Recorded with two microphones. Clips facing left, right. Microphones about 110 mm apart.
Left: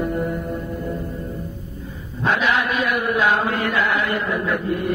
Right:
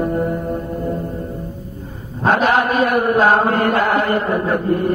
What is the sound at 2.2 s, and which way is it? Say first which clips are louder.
Chant: right 5 dB; 45° right (ahead or behind).